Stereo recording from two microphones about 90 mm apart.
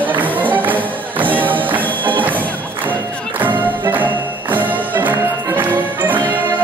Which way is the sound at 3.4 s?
20° right (ahead or behind).